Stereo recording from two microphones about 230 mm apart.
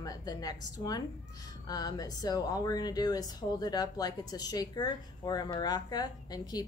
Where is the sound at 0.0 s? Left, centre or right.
Centre.